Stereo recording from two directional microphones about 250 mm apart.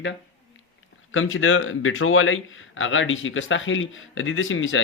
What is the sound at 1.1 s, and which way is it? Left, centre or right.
A man's voice, left.